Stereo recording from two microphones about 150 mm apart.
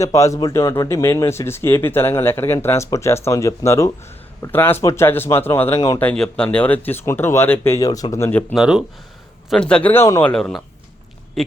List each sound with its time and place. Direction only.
0.0 s speech: 20° left (ahead or behind)
6.0 s speech: 5° left (ahead or behind)
8.5 s speech: 5° right (ahead or behind)
9.5 s speech: 5° left (ahead or behind)